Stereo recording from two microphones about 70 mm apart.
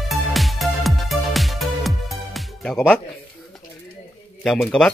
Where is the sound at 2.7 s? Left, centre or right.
Centre.